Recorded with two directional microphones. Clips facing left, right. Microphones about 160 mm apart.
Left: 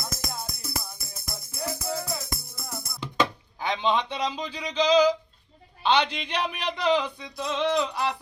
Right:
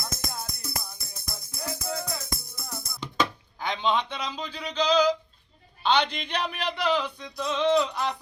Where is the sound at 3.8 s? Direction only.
15° left (ahead or behind).